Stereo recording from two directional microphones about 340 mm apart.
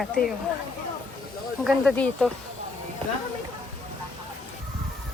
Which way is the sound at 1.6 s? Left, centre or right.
Centre.